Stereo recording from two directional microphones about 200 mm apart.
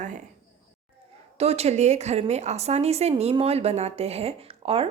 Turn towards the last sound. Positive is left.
turn(degrees=-30)  # may be behind; listen again after turning